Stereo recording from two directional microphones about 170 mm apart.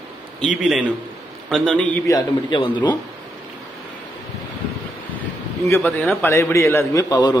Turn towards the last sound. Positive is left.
turn(degrees=20)  # may be behind; listen again after turning